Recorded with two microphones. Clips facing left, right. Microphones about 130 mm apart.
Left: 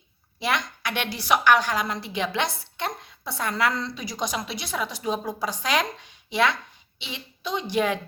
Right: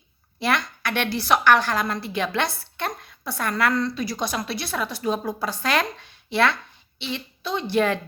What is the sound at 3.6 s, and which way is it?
Speech, 55° right (ahead or behind).